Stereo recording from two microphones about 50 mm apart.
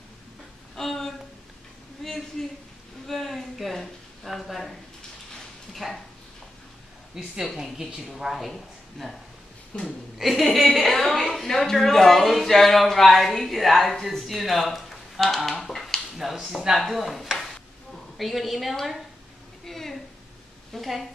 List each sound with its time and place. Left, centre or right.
0.7 s a sound: centre
7.2 s a woman's voice: centre
9.7 s a woman's voice: left
10.1 s a woman's voice: centre
19.6 s a sound: centre
20.7 s a woman's voice: centre